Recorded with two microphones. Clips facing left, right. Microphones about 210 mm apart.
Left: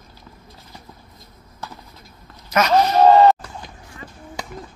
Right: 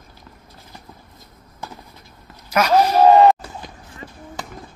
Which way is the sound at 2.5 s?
5° right (ahead or behind).